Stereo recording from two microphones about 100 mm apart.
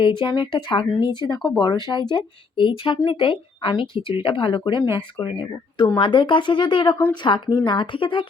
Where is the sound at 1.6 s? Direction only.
45° left (ahead or behind).